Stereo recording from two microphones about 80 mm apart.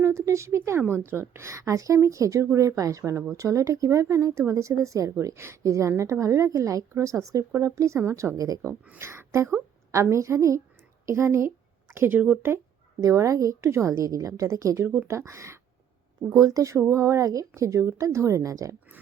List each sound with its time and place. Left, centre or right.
0.0 s speech: right
9.0 s a woman's voice: right
13.0 s a woman's voice: right
14.8 s a woman's voice: right